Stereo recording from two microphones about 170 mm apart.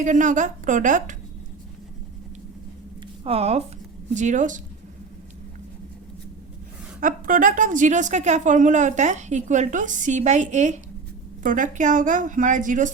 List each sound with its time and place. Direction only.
0.0 s a woman's voice: 50° right (ahead or behind)
3.2 s a woman's voice: 35° right (ahead or behind)
7.0 s a woman's voice: 55° right (ahead or behind)